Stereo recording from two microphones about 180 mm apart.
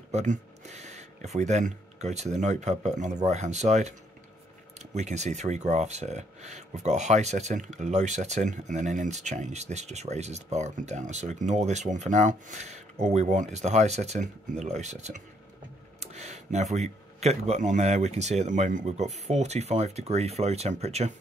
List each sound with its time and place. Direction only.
0.1 s speech: 40° right (ahead or behind)
4.9 s speech: 40° right (ahead or behind)
16.0 s a sound: 40° right (ahead or behind)
16.7 s speech: 40° right (ahead or behind)